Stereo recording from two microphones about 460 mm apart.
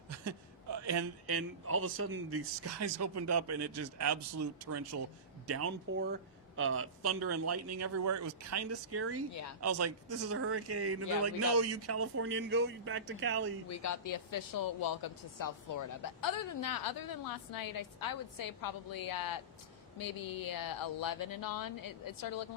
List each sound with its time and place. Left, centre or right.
0.3 s a man's voice: right
13.7 s a woman's voice: left